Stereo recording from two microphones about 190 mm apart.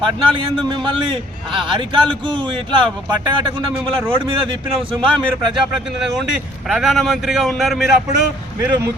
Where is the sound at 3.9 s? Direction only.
25° right (ahead or behind).